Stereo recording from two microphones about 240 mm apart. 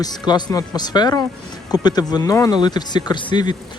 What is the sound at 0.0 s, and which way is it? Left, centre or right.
Speech, centre.